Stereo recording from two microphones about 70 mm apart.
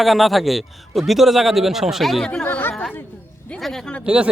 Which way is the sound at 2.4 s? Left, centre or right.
Left.